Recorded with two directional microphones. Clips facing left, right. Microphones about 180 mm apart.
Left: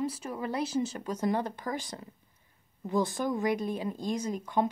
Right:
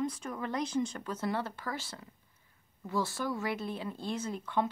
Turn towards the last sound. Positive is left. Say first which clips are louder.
# left 4 dB
turn(degrees=15)  # may be behind; listen again after turning